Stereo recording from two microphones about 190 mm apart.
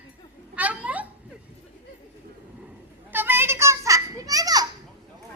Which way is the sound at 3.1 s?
10° right (ahead or behind).